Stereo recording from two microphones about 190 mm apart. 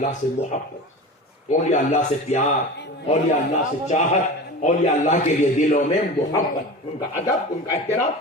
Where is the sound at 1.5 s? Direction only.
40° left (ahead or behind).